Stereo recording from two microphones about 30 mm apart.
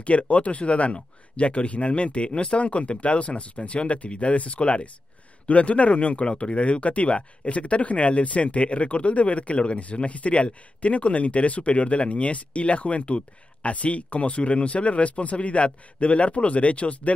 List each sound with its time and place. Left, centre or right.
0.0 s speech: left